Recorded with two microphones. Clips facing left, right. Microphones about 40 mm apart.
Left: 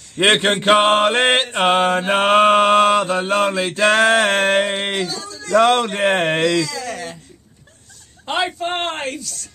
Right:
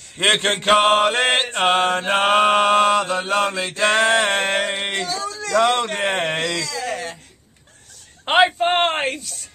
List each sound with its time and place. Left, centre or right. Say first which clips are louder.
0.2 s speech: left 3 dB; centre
1.5 s mantra: left 2 dB; centre
5.9 s speech: left 4 dB; centre
6.8 s a sound: right 1 dB; centre
8.3 s speech: right 5 dB; right